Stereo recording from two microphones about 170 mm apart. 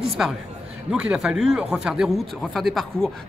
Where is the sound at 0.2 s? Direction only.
5° right (ahead or behind).